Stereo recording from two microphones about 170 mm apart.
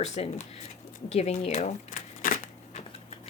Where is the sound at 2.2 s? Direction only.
55° left (ahead or behind).